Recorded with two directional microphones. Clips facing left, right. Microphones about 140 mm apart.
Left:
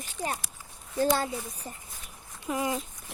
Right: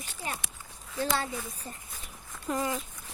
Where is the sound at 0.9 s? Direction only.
40° left (ahead or behind).